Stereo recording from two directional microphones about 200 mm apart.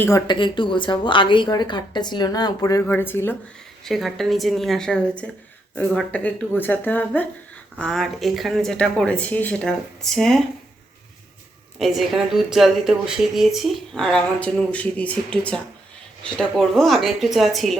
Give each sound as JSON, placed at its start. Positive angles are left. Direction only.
{"t": 0.0, "sound": "a woman's voice", "side_deg": 20}
{"t": 11.8, "sound": "speech", "side_deg": 0}